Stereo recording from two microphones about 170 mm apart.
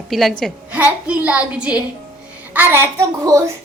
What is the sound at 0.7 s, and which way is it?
A woman's voice, 10° right (ahead or behind).